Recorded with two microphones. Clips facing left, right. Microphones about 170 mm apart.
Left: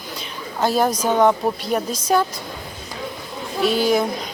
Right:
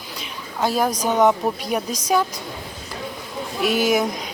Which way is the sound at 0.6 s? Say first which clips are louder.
Left 2 dB; 10° right (ahead or behind).